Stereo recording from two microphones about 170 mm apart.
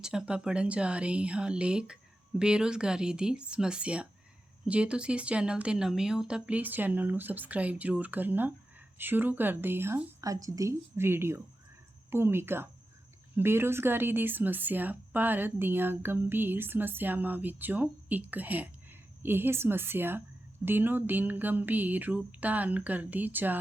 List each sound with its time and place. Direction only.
0.0 s speech: 5° right (ahead or behind)